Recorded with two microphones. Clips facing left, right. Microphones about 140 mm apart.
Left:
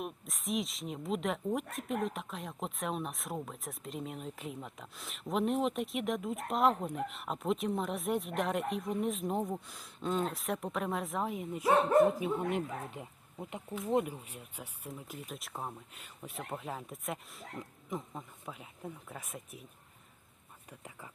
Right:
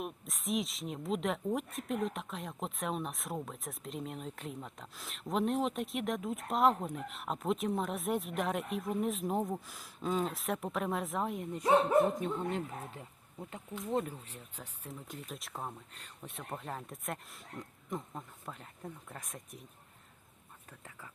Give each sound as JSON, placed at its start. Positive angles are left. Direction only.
{"t": 0.0, "sound": "speech", "side_deg": 0}
{"t": 12.2, "sound": "speech", "side_deg": 15}
{"t": 20.7, "sound": "speech", "side_deg": 15}